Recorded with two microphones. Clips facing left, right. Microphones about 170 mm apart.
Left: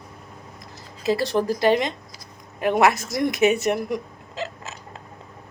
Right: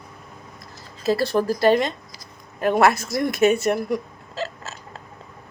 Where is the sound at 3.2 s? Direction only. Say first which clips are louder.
Right 1 dB; 15° left (ahead or behind).